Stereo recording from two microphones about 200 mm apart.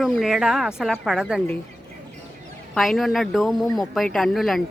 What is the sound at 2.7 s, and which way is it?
Speech, centre (ahead or behind).